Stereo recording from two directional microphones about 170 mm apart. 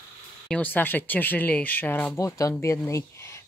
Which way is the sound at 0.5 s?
10° left (ahead or behind).